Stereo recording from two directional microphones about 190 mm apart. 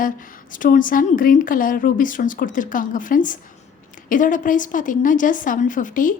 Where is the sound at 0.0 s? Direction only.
45° left (ahead or behind).